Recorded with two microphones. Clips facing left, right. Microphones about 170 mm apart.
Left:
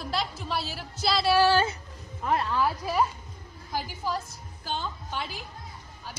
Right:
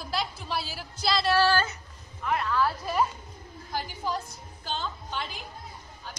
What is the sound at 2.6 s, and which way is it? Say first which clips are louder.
A woman's voice: even; 10° left (ahead or behind).